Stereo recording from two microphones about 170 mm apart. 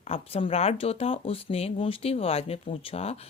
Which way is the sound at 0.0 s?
35° left (ahead or behind).